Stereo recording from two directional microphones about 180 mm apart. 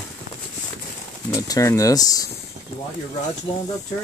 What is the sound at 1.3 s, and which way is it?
Speech, 15° left (ahead or behind).